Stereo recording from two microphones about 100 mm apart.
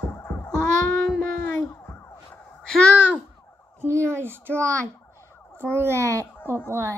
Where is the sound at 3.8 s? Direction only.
25° right (ahead or behind).